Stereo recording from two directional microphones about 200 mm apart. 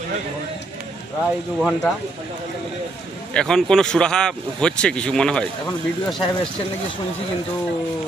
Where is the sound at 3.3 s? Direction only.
5° left (ahead or behind).